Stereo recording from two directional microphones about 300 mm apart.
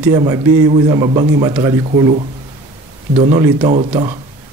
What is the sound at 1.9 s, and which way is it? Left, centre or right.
Speech, right.